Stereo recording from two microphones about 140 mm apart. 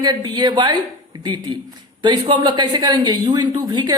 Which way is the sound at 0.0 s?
30° right (ahead or behind).